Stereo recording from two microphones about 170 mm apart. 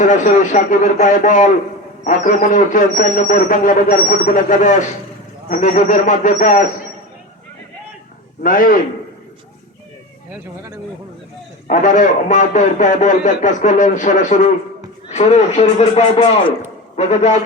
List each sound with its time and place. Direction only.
0.0 s a man's voice: 50° left (ahead or behind)
8.4 s a man's voice: 55° left (ahead or behind)
11.7 s a man's voice: 50° left (ahead or behind)